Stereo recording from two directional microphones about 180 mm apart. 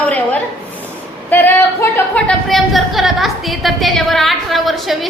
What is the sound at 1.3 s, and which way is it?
Speech, 10° left (ahead or behind).